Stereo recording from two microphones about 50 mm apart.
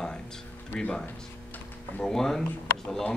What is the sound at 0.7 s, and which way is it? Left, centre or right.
Speech, left.